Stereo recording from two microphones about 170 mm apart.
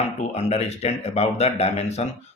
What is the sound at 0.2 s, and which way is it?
Speech, 40° left (ahead or behind).